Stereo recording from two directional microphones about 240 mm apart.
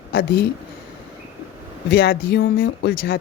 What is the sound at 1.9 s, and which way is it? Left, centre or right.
Speech, left.